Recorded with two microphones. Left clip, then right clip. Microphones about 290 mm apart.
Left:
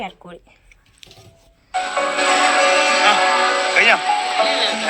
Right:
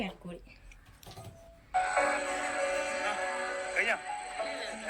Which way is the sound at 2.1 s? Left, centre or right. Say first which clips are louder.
Left 18 dB; left.